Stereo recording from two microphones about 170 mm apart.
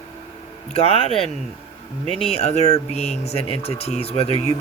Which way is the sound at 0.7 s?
35° left (ahead or behind).